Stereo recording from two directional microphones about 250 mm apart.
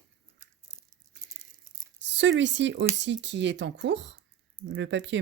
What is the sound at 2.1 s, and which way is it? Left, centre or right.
Speech, right.